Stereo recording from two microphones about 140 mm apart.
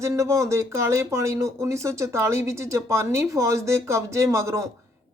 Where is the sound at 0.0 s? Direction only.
20° right (ahead or behind).